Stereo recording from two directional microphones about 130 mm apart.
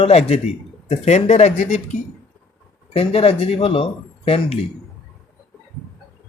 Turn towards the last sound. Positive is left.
turn(degrees=50)  # may be behind; listen again after turning